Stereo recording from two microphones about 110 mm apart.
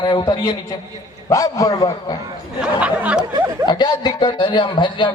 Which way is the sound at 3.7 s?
40° left (ahead or behind).